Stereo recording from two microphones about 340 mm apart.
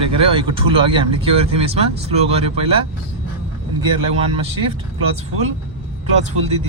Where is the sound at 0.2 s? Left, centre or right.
Centre.